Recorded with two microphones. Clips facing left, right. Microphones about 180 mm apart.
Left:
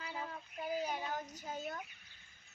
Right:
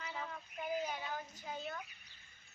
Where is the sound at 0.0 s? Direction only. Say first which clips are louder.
Left 1 dB; 35° left (ahead or behind).